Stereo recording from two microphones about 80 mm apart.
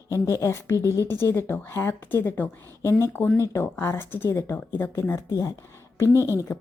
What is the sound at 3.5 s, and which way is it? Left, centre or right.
Speech, left.